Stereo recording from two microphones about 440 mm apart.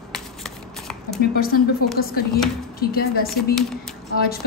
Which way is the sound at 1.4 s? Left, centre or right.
Left.